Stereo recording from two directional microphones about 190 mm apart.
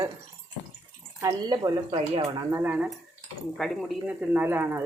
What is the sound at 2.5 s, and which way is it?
Speech, 10° right (ahead or behind).